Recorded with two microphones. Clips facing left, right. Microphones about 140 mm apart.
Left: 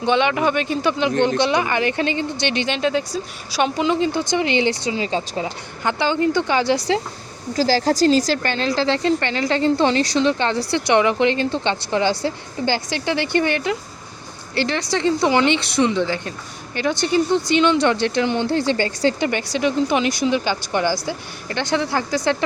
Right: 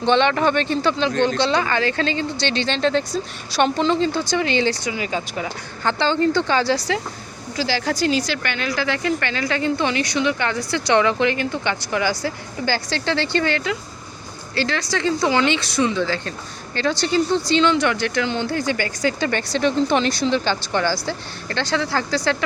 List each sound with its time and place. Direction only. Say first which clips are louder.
0.0 s speech: right 1 dB; 10° left (ahead or behind); by 5.5 s 30° left (ahead or behind)
5.8 s speech: even; 15° left (ahead or behind)
7.5 s a woman's voice: left 5 dB; 40° left (ahead or behind)
19.3 s speech: even; 15° left (ahead or behind)